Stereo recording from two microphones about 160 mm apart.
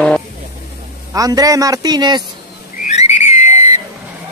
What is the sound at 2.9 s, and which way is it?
Whistle, 45° left (ahead or behind).